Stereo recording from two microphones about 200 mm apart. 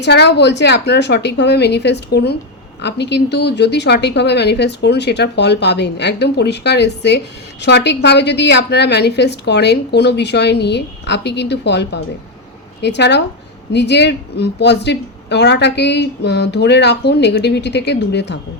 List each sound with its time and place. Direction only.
0.0 s a woman's voice: 55° left (ahead or behind)